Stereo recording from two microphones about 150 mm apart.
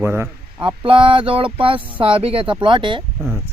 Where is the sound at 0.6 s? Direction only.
35° right (ahead or behind).